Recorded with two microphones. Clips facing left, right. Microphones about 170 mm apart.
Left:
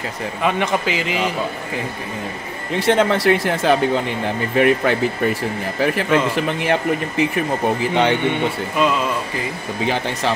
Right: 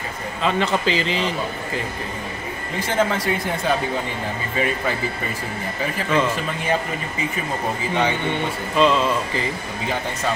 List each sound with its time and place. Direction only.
0.4 s a man's voice: 15° left (ahead or behind)
2.8 s speech: 70° left (ahead or behind)
8.3 s a man's voice: 15° left (ahead or behind)